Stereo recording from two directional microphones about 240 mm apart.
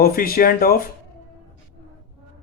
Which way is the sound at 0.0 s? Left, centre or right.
Left.